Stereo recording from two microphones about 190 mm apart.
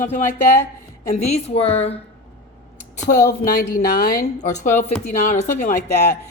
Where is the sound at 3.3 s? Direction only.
55° left (ahead or behind).